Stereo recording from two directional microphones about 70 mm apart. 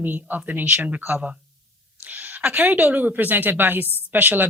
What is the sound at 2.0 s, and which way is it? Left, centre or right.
A woman's voice, right.